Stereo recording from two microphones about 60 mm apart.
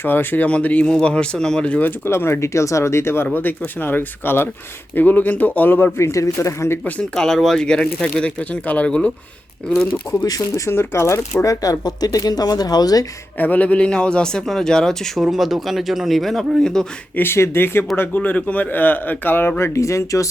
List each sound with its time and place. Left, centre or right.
0.0 s a man's voice: left
0.4 s a man's voice: left
2.0 s speech: left
3.2 s a man's voice: left
6.0 s speech: left
7.0 s a man's voice: centre
10.2 s speech: left
10.7 s speech: left
11.6 s speech: left
13.4 s a man's voice: left; by 15.2 s centre
15.2 s speech: centre
17.2 s a man's voice: left